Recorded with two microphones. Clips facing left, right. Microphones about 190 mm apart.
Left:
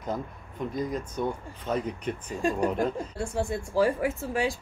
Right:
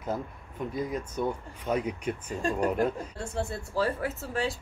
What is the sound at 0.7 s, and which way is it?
Speech, 10° right (ahead or behind).